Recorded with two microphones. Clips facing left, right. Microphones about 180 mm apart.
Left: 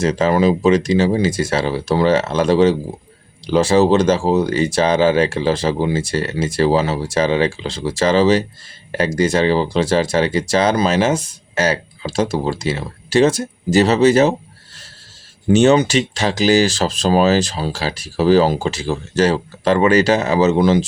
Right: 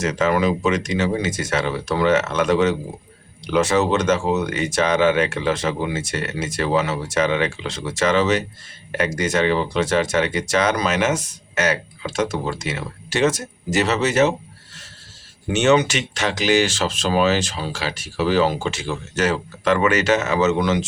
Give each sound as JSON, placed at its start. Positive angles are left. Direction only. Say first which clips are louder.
{"t": 0.0, "sound": "speech", "louder": "left 4 dB", "side_deg": 30}
{"t": 15.4, "sound": "speech", "louder": "left 5 dB", "side_deg": 35}